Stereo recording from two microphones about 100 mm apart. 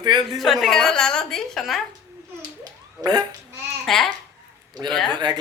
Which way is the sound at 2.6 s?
40° right (ahead or behind).